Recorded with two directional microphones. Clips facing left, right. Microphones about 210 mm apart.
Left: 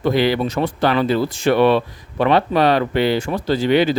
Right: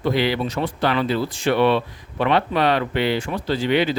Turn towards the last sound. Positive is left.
turn(degrees=40)  # may be behind; listen again after turning